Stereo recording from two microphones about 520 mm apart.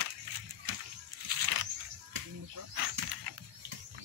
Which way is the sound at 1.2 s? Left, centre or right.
Right.